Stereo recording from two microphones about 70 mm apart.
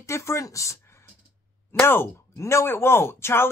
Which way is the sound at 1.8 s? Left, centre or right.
Left.